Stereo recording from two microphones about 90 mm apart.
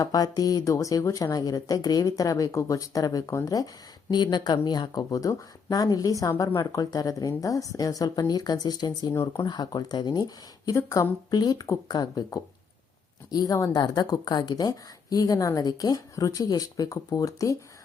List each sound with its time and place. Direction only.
0.0 s a woman's voice: 45° left (ahead or behind)
4.1 s a woman's voice: 55° left (ahead or behind)